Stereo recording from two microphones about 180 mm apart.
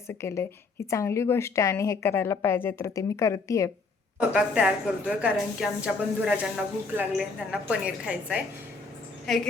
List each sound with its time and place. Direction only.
0.1 s a woman's voice: 15° left (ahead or behind)
4.3 s a woman's voice: 5° right (ahead or behind)